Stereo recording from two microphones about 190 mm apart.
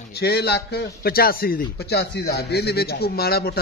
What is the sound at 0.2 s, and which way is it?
A man's voice, 60° left (ahead or behind).